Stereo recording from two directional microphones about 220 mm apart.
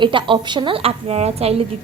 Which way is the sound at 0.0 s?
20° right (ahead or behind).